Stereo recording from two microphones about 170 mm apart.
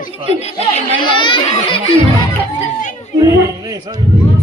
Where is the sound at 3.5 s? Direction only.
20° right (ahead or behind).